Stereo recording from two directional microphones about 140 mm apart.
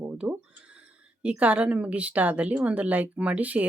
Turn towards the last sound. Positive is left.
turn(degrees=-10)  # may be behind; listen again after turning